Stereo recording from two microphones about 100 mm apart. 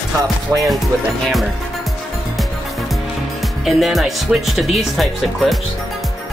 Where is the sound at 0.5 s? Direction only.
25° right (ahead or behind).